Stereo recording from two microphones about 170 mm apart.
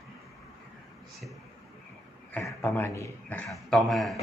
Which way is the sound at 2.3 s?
10° left (ahead or behind).